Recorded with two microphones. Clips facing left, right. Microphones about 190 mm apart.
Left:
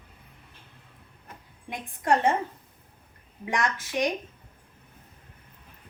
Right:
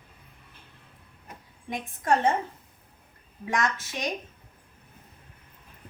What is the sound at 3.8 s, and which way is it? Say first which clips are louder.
Speech: left 7 dB; 15° left (ahead or behind).